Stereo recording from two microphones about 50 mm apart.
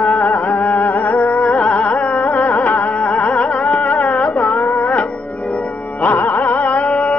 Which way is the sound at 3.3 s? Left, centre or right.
Left.